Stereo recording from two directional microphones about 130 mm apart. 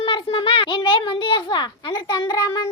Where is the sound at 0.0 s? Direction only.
40° left (ahead or behind).